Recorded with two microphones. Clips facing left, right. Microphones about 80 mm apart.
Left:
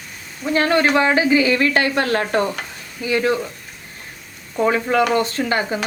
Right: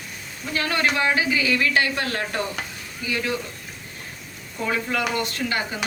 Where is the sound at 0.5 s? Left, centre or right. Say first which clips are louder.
Left 7 dB; left.